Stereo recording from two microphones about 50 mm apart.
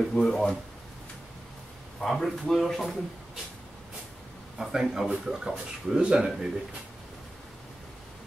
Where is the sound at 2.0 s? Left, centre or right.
Centre.